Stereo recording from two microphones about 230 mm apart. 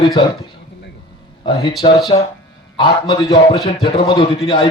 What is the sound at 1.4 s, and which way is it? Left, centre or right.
A man's voice, left.